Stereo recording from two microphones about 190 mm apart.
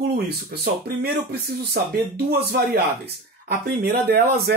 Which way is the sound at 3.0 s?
55° right (ahead or behind).